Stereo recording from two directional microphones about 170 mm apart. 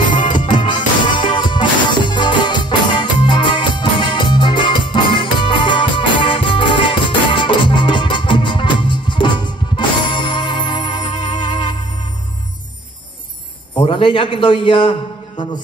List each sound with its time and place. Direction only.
0.5 s music: 25° left (ahead or behind)
11.2 s music: 45° left (ahead or behind)
13.8 s a man's voice: 30° left (ahead or behind)